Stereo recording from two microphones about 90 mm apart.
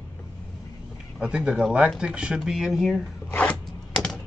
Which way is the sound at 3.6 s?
5° left (ahead or behind).